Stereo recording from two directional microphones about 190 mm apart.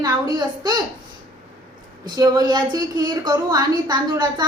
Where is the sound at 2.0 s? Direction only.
20° right (ahead or behind).